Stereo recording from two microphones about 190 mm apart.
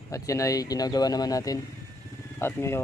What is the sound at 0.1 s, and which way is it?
Speech, 15° left (ahead or behind).